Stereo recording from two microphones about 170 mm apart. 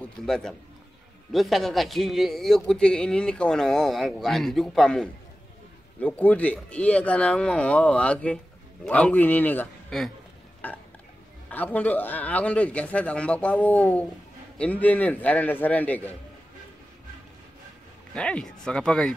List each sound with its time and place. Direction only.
0.0 s a man's voice: 5° left (ahead or behind)
11.4 s a man's voice: 10° left (ahead or behind)
18.1 s a man's voice: 5° left (ahead or behind)